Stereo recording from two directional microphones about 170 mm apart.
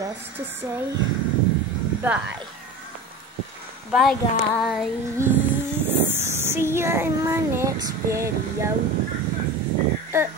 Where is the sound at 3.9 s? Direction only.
Centre (ahead or behind).